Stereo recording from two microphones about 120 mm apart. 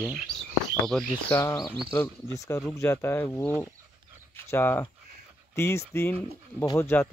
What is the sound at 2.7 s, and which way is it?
Speech, 20° left (ahead or behind).